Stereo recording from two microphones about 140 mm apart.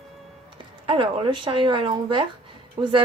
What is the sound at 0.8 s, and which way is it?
Speech, 35° right (ahead or behind).